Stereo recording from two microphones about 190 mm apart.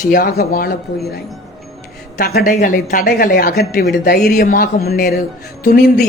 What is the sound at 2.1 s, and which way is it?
A woman's voice, 55° left (ahead or behind).